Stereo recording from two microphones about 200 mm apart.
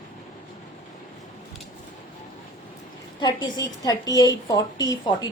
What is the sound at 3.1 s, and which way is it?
A woman's voice, 20° left (ahead or behind).